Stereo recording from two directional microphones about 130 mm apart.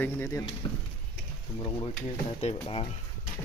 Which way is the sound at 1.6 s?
30° left (ahead or behind).